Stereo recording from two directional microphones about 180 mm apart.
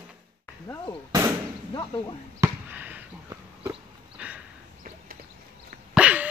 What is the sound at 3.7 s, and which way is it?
Dog, 5° right (ahead or behind).